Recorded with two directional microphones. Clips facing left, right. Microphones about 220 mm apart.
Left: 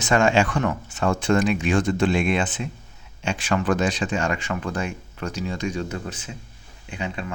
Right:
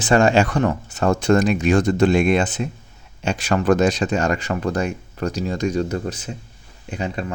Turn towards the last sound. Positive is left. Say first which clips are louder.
# right 4 dB
turn(degrees=-40)  # may be behind; listen again after turning